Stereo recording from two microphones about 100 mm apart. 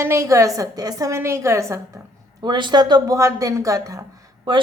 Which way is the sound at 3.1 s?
35° right (ahead or behind).